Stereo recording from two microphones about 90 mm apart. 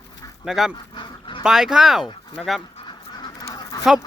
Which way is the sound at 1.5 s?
5° right (ahead or behind).